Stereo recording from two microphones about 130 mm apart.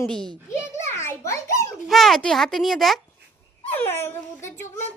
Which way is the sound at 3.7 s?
15° left (ahead or behind).